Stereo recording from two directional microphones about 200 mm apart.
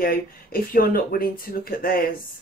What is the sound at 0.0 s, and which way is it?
Speech, 45° left (ahead or behind).